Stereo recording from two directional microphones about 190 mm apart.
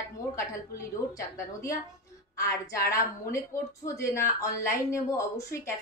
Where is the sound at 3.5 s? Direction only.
15° left (ahead or behind).